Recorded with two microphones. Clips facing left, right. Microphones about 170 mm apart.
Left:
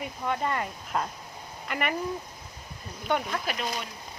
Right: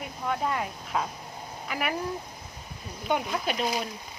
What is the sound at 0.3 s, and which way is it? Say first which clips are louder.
Speech: even; centre (ahead or behind).